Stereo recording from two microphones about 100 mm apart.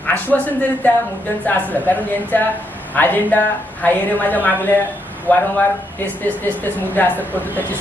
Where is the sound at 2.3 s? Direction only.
20° left (ahead or behind).